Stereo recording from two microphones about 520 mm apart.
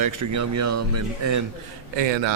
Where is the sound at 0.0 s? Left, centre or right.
Right.